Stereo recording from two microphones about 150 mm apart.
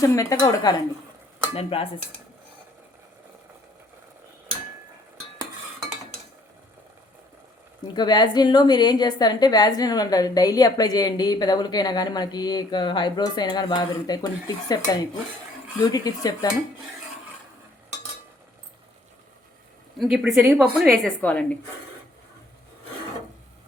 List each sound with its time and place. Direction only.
0.0 s a woman's voice: 20° left (ahead or behind)
1.5 s cutlery: 40° left (ahead or behind)
7.9 s a woman's voice: 30° left (ahead or behind)
15.8 s a woman's voice: 25° left (ahead or behind)
20.0 s a woman's voice: 5° right (ahead or behind)
21.0 s a woman's voice: 10° left (ahead or behind)